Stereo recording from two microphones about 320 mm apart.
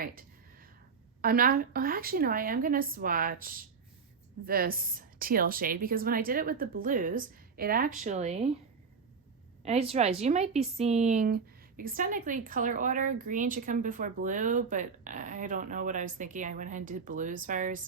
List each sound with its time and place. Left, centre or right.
0.0 s a sound: right
1.2 s speech: right
9.6 s speech: centre